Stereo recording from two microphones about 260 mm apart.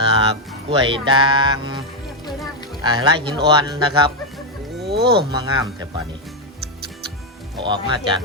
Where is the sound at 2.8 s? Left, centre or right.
Centre.